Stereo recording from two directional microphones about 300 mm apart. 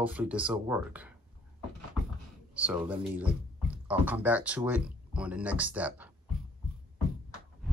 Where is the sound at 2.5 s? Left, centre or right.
Centre.